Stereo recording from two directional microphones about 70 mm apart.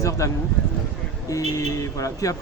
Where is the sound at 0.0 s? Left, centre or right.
Left.